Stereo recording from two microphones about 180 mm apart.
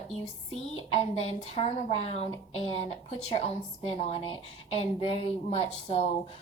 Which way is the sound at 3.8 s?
30° left (ahead or behind).